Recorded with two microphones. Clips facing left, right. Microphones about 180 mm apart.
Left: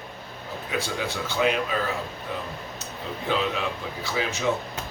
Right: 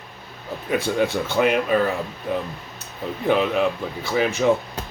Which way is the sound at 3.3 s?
55° right (ahead or behind).